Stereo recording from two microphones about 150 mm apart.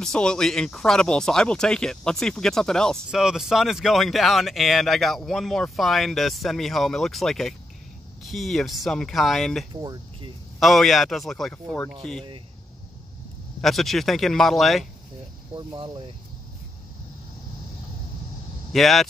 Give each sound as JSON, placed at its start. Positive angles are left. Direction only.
{"t": 0.0, "sound": "speech", "side_deg": 5}
{"t": 9.8, "sound": "cricket", "side_deg": -30}
{"t": 10.6, "sound": "speech", "side_deg": 0}
{"t": 13.6, "sound": "speech", "side_deg": 0}
{"t": 15.5, "sound": "speech", "side_deg": -35}
{"t": 18.7, "sound": "speech", "side_deg": 0}